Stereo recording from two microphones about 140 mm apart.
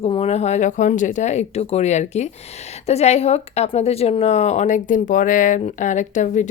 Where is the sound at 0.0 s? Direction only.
45° left (ahead or behind).